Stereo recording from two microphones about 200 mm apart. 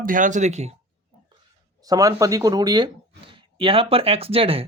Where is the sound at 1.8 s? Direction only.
15° right (ahead or behind).